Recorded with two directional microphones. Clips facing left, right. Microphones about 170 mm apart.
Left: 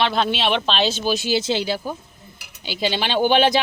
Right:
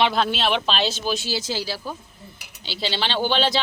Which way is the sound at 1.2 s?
20° left (ahead or behind).